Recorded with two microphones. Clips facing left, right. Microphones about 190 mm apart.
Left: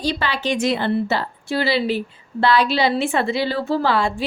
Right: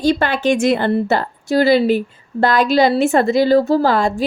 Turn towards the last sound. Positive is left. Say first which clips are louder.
# right 4 dB
turn(degrees=-40)  # may be behind; listen again after turning